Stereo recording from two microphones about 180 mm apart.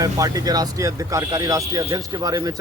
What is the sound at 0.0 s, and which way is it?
Speech, 20° right (ahead or behind).